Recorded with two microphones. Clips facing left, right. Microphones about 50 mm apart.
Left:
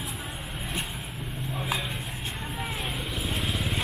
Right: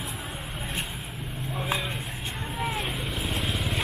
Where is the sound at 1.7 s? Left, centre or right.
Centre.